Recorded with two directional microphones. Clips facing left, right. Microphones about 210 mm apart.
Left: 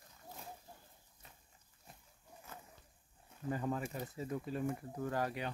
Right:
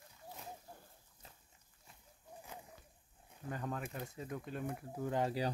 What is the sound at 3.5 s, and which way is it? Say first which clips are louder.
Speech: left 4 dB; 5° left (ahead or behind).